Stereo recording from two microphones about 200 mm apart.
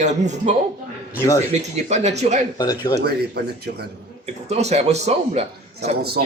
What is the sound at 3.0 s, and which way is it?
Speech, 55° right (ahead or behind).